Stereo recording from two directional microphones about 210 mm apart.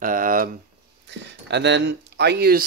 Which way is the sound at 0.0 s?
40° right (ahead or behind).